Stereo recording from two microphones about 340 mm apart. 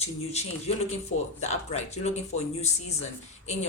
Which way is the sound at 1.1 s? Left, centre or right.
Left.